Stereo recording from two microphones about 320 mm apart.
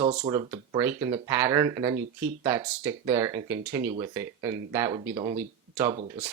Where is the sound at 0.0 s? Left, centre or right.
Centre.